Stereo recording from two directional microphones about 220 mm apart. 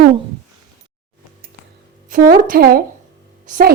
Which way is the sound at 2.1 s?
40° right (ahead or behind).